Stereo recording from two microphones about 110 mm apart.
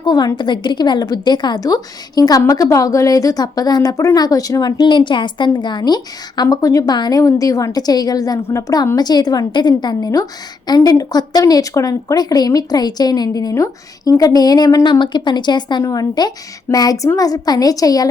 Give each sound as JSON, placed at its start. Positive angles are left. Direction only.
{"t": 0.0, "sound": "a woman's voice", "side_deg": 40}
{"t": 14.8, "sound": "a woman's voice", "side_deg": 45}